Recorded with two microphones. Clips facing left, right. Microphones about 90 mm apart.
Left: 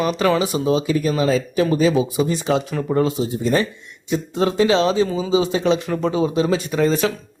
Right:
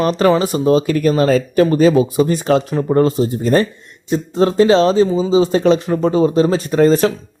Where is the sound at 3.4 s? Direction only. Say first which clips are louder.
Right 5 dB; 45° right (ahead or behind).